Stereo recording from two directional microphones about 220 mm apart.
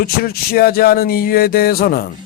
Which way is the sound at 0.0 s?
45° left (ahead or behind).